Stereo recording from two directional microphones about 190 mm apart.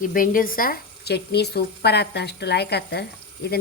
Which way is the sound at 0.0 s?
45° left (ahead or behind).